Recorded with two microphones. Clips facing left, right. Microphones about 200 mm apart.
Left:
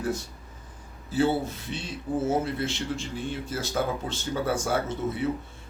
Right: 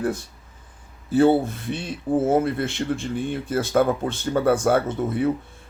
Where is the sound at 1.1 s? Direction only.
55° right (ahead or behind).